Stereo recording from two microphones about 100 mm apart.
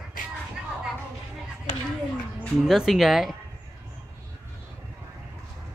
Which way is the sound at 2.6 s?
Centre (ahead or behind).